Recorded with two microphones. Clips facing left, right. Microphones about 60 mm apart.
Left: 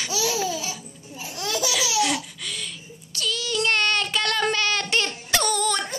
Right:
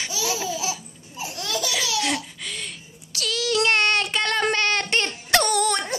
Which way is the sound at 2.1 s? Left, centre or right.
Right.